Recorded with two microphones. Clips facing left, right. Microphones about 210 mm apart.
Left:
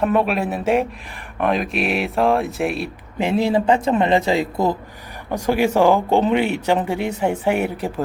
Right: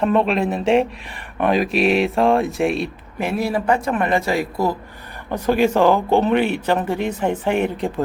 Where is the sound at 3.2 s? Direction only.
20° left (ahead or behind).